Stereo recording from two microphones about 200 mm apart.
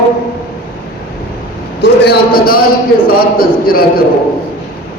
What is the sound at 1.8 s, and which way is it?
Speech, 55° left (ahead or behind).